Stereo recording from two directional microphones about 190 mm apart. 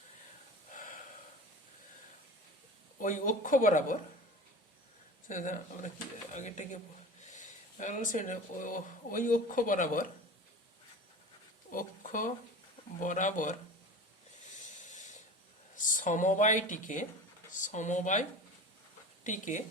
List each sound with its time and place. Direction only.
0.7 s snort: 45° left (ahead or behind)
3.0 s speech: 45° left (ahead or behind)
5.3 s speech: 40° left (ahead or behind)
11.7 s speech: 45° left (ahead or behind)
14.5 s a sound: 40° left (ahead or behind)
15.7 s speech: 45° left (ahead or behind)